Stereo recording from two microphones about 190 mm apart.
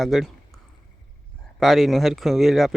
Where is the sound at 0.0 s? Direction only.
Centre (ahead or behind).